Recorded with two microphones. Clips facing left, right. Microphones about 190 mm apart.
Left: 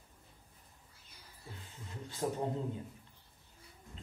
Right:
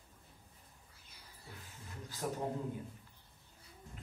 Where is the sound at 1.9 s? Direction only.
25° left (ahead or behind).